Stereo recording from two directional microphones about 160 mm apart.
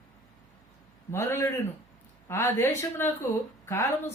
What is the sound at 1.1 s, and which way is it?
Speech, 15° left (ahead or behind).